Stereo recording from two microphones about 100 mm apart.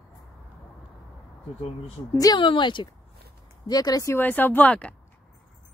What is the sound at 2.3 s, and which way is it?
Speech, 55° left (ahead or behind).